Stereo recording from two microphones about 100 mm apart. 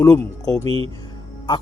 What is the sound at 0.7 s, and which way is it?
Speech, 65° right (ahead or behind).